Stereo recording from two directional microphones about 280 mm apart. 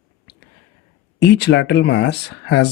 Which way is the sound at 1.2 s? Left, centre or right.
Left.